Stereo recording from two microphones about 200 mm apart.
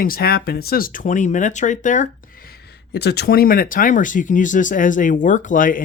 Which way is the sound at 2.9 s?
55° left (ahead or behind).